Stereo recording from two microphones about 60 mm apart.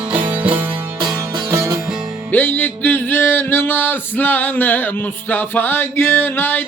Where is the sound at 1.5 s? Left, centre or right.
Right.